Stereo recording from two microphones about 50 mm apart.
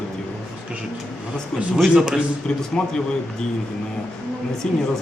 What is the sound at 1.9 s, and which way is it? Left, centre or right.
Speech, centre.